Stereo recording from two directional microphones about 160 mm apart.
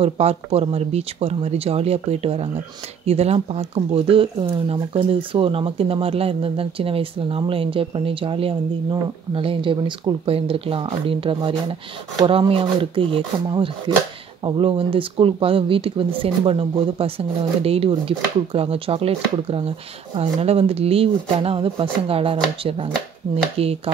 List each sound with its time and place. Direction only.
0.0 s speech: 40° right (ahead or behind)